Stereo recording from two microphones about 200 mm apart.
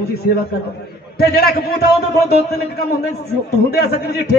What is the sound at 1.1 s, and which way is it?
A man's voice, 50° left (ahead or behind).